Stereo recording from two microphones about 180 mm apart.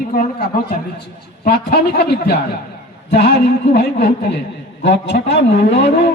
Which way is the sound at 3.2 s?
60° left (ahead or behind).